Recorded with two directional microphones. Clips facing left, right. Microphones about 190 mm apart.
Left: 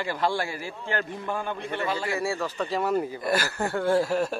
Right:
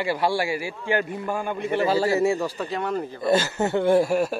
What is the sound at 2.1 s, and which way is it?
Speech, 20° right (ahead or behind).